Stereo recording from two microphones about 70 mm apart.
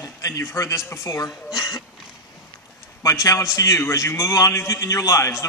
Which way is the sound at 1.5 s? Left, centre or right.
Left.